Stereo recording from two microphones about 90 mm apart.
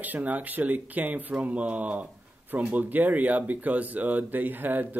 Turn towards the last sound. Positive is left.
turn(degrees=-20)  # may be behind; listen again after turning